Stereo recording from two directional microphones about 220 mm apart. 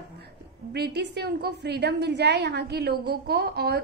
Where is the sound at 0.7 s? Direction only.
50° right (ahead or behind).